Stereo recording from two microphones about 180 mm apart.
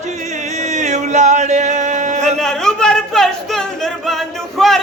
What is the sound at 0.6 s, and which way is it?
Music, 40° right (ahead or behind).